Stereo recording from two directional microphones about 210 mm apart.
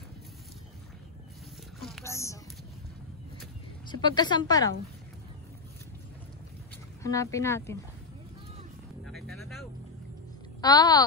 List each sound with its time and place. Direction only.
1.8 s a sound: centre (ahead or behind)
2.0 s speech: 15° left (ahead or behind)
3.9 s a woman's voice: 20° left (ahead or behind)
7.0 s speech: 15° left (ahead or behind)
9.0 s music: centre (ahead or behind)
10.6 s a woman's voice: 20° left (ahead or behind)